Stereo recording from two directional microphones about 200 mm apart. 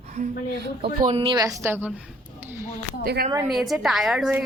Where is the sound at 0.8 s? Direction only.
30° right (ahead or behind).